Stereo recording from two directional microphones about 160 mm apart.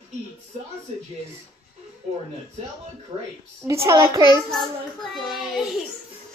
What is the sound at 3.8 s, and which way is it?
Speech, 20° right (ahead or behind).